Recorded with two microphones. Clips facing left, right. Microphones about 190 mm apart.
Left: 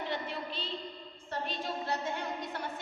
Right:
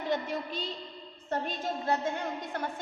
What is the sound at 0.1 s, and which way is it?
A woman's voice, 45° right (ahead or behind).